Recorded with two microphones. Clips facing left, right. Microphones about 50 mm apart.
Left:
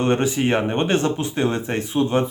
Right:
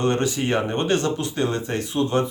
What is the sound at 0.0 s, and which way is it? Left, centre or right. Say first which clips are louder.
Speech: left 3 dB; left.